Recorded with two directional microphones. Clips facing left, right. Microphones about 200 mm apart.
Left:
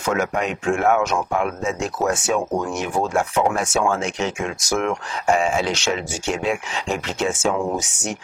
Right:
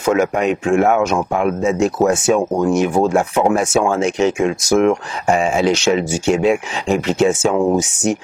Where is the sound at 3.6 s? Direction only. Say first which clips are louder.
Right 5 dB; 5° right (ahead or behind).